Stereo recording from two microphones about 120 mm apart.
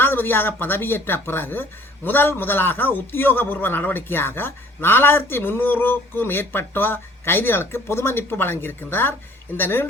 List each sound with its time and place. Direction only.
0.0 s a man's voice: 15° left (ahead or behind)